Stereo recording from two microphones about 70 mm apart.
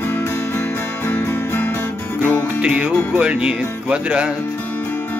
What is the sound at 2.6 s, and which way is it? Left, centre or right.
Music, centre.